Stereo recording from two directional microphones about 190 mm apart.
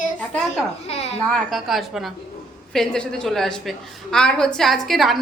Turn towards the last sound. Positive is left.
turn(degrees=0)  # may be behind; listen again after turning